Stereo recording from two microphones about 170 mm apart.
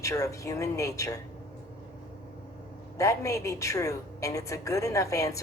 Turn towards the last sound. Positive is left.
turn(degrees=20)  # may be behind; listen again after turning